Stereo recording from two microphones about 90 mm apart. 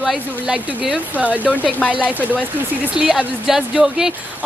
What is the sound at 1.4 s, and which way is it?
Speech, 15° left (ahead or behind).